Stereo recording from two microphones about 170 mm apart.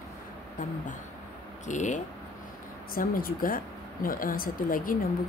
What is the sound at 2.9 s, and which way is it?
Speech, 55° left (ahead or behind).